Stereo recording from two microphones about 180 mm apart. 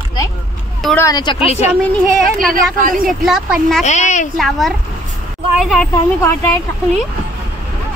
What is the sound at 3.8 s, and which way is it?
Speech, 40° left (ahead or behind).